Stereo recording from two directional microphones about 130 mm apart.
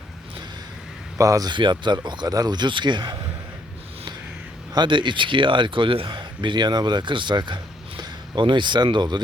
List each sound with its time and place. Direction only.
1.2 s speech: 25° right (ahead or behind)
4.7 s speech: 35° right (ahead or behind)